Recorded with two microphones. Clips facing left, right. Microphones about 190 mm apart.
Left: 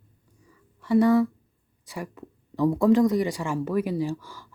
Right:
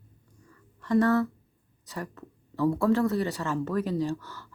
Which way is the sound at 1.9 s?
10° left (ahead or behind).